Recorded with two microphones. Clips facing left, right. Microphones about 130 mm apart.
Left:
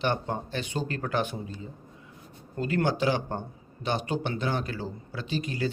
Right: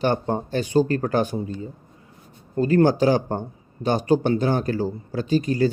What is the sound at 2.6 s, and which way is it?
Speech, 40° right (ahead or behind).